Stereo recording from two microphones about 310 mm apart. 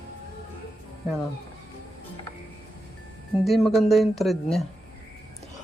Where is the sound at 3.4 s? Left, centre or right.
Centre.